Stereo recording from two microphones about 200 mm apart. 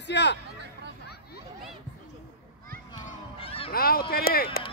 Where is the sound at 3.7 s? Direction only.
50° left (ahead or behind).